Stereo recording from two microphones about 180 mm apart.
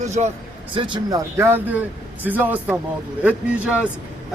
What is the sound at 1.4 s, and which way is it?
A man's voice, 10° right (ahead or behind).